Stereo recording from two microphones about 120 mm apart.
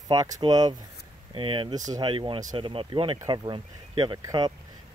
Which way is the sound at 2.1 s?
45° right (ahead or behind).